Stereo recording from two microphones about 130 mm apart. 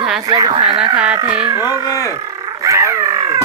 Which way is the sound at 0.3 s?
30° right (ahead or behind).